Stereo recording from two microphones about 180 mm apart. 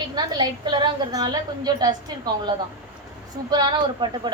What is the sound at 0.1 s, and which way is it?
A woman's voice, 25° right (ahead or behind).